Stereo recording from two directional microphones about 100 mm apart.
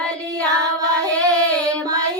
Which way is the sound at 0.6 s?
40° right (ahead or behind).